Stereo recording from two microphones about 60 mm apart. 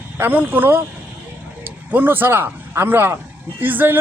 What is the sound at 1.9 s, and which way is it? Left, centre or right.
A man's voice, right.